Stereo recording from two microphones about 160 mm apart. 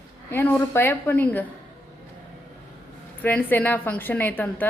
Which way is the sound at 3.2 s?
10° left (ahead or behind).